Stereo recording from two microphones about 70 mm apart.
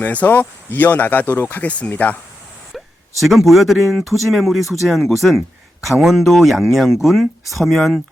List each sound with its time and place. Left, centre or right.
0.0 s speech: left
2.7 s speech: centre